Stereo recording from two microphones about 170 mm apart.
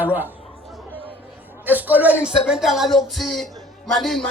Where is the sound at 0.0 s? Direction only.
10° right (ahead or behind).